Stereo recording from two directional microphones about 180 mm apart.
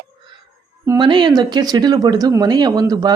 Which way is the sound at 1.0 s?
25° right (ahead or behind).